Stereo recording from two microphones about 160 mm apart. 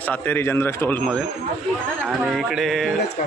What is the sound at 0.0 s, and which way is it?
A man's voice, 10° left (ahead or behind).